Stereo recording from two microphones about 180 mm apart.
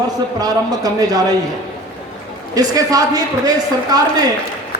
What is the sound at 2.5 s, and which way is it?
Speech, 20° right (ahead or behind).